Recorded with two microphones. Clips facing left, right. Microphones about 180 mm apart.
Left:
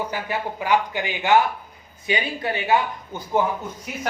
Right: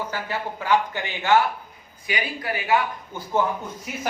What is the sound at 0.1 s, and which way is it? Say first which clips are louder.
Speech: left 2 dB; 15° left (ahead or behind).